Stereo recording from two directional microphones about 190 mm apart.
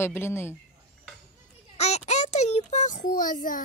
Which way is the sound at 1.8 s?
35° left (ahead or behind).